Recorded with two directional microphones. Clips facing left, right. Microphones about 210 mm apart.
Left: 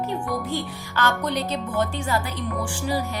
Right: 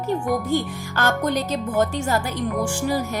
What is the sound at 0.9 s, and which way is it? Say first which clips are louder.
Speech: right 2 dB; 45° right (ahead or behind).